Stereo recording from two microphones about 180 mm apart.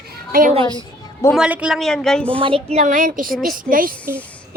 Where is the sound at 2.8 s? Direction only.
45° right (ahead or behind).